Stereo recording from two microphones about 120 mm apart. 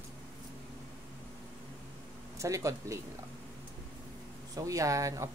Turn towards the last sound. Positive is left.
turn(degrees=-25)  # may be behind; listen again after turning